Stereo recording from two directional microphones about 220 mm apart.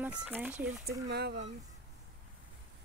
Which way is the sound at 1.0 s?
50° right (ahead or behind).